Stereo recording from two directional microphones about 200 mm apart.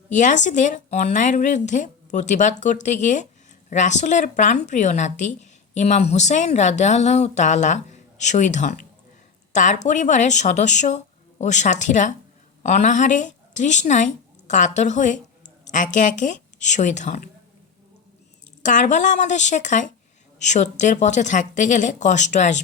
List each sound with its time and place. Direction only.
0.1 s a woman's voice: 40° left (ahead or behind)
18.6 s speech: 40° left (ahead or behind)